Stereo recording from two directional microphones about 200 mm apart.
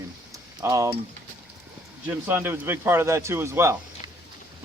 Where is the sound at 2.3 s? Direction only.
10° right (ahead or behind).